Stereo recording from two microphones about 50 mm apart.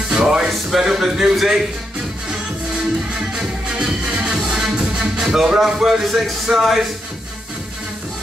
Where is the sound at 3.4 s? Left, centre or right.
Centre.